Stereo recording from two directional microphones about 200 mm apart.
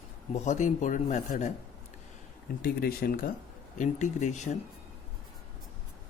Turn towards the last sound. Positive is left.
turn(degrees=35)  # may be behind; listen again after turning